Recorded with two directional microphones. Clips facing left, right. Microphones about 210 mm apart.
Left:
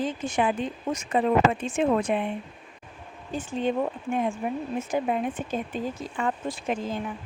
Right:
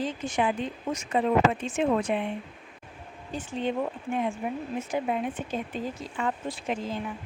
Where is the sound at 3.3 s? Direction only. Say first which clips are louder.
Left 3 dB; 45° left (ahead or behind).